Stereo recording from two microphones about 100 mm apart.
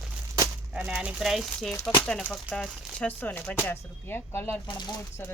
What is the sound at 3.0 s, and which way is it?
Speech, 15° left (ahead or behind).